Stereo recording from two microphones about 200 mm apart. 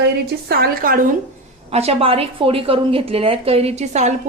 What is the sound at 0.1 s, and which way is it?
Speech, 55° right (ahead or behind).